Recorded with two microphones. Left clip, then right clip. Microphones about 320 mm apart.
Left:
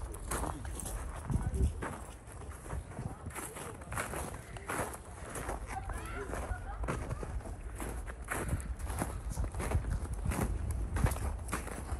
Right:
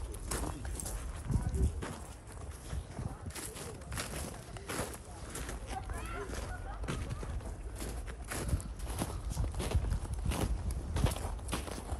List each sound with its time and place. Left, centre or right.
0.3 s horse: centre
0.8 s dog: centre
3.3 s a sound: centre
7.8 s walk: centre
11.0 s clip-clop: centre